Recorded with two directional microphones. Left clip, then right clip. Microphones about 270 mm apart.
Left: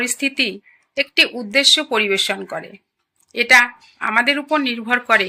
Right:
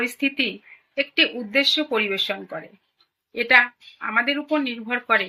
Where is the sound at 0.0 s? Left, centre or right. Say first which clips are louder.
Left 4 dB; left.